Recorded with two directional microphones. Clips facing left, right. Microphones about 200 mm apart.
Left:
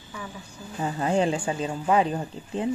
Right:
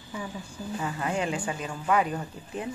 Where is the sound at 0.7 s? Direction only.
30° left (ahead or behind).